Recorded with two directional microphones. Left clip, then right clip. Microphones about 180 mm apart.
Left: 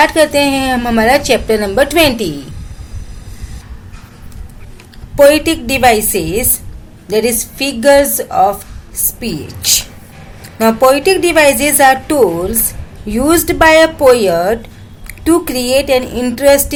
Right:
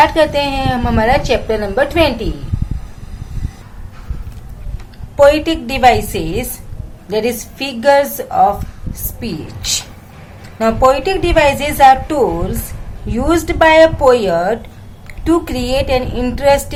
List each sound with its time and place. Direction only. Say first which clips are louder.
0.0 s a woman's voice: left 2 dB; 30° left (ahead or behind)
5.1 s a woman's voice: left 2 dB; 30° left (ahead or behind)